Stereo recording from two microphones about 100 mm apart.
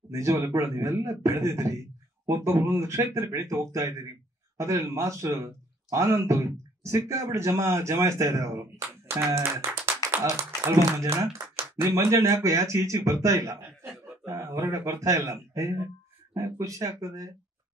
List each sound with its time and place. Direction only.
0.1 s speech: 35° right (ahead or behind)